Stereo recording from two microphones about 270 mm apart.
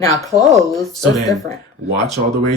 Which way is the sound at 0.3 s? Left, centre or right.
Centre.